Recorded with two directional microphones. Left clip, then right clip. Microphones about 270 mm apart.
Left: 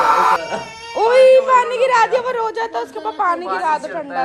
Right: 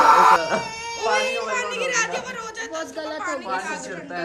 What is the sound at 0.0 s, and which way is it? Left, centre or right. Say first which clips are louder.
Dog: even; centre.